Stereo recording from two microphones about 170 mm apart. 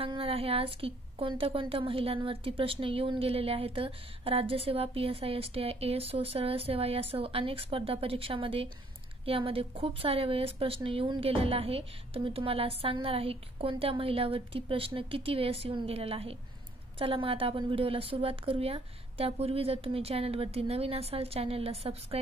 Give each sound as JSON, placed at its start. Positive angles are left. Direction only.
{"t": 0.0, "sound": "a woman's voice", "side_deg": -30}